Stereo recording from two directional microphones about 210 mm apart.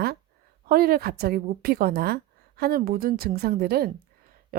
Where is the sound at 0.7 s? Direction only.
45° right (ahead or behind).